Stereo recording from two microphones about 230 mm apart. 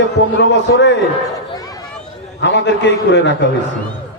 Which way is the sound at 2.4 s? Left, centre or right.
Left.